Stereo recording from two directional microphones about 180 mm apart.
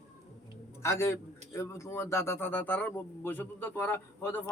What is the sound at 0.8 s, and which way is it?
A man's voice, 15° left (ahead or behind).